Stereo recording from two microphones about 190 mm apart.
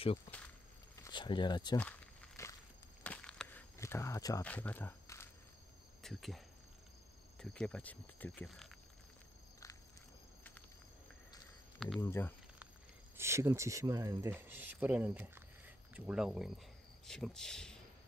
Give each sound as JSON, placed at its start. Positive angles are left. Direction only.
{"t": 1.0, "sound": "speech", "side_deg": 25}
{"t": 1.8, "sound": "walk", "side_deg": 10}
{"t": 4.5, "sound": "speech", "side_deg": 10}
{"t": 6.0, "sound": "speech", "side_deg": 0}
{"t": 12.0, "sound": "speech", "side_deg": 15}
{"t": 13.2, "sound": "speech", "side_deg": -15}